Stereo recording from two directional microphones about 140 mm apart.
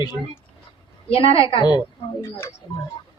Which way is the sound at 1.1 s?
40° left (ahead or behind).